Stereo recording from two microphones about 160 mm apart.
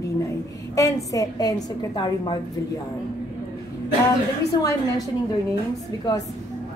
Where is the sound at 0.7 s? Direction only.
20° left (ahead or behind).